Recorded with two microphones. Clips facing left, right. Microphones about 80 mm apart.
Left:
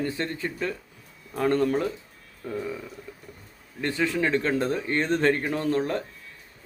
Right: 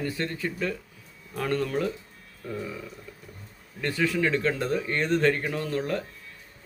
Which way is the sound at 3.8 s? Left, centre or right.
Left.